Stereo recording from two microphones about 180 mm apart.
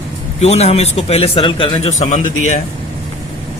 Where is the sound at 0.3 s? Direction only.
35° left (ahead or behind).